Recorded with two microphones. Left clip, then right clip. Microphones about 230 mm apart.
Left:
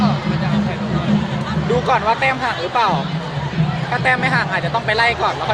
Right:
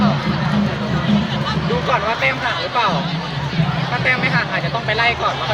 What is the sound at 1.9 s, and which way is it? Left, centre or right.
Speech, left.